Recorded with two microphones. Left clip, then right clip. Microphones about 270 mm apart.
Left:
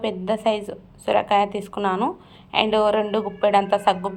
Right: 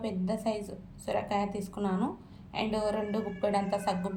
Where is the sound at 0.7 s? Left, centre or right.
Left.